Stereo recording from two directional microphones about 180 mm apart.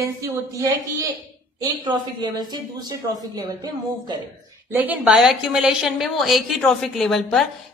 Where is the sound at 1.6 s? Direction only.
25° right (ahead or behind).